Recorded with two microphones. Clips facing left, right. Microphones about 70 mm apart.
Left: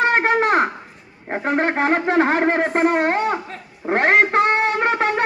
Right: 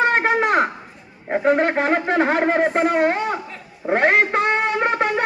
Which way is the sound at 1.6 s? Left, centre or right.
Left.